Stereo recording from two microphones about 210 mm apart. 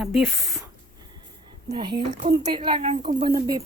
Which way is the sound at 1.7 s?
25° right (ahead or behind).